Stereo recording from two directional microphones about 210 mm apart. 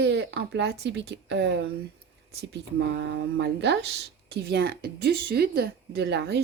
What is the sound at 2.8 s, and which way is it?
Speech, 55° right (ahead or behind).